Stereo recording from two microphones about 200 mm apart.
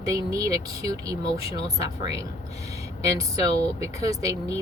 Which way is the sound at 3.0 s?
15° right (ahead or behind).